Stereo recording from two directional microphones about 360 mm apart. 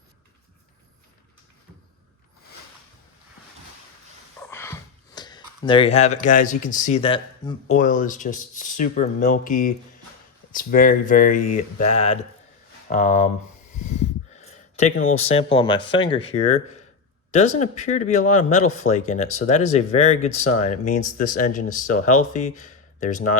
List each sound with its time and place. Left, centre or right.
4.4 s speech: centre
13.7 s a sound: centre
15.1 s speech: centre